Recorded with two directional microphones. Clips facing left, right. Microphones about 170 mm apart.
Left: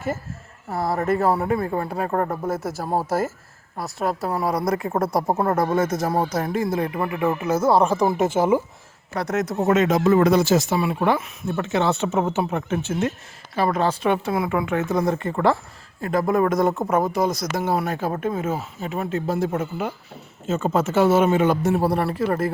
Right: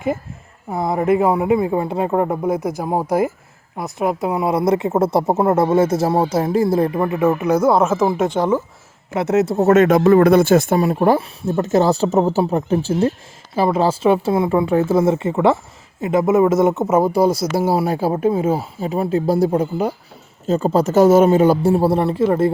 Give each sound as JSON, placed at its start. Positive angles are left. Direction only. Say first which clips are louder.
{"t": 0.7, "sound": "speech", "louder": "right 5 dB", "side_deg": -20}
{"t": 7.0, "sound": "speech", "louder": "right 6 dB", "side_deg": -20}
{"t": 9.1, "sound": "speech", "louder": "right 7 dB", "side_deg": -25}
{"t": 9.6, "sound": "speech", "louder": "right 5 dB", "side_deg": -55}